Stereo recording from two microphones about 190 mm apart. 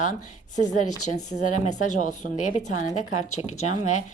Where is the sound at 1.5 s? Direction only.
40° left (ahead or behind).